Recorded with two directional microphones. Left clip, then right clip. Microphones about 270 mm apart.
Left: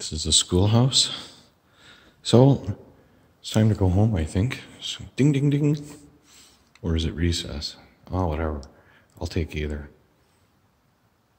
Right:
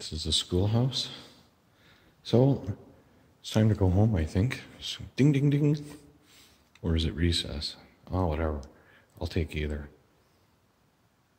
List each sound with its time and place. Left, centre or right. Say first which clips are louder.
0.0 s speech: left 7 dB; centre
1.8 s a sound: left 10 dB; centre
3.4 s speech: left 4 dB; centre